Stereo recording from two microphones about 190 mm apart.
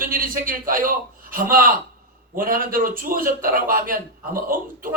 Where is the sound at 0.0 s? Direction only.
50° right (ahead or behind).